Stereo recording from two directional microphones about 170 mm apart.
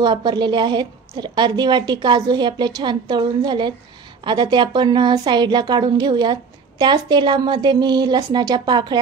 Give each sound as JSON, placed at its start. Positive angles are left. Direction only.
{"t": 0.0, "sound": "a woman's voice", "side_deg": -25}